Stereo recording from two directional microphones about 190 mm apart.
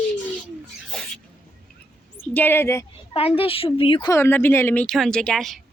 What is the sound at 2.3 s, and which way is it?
Speech, 10° left (ahead or behind).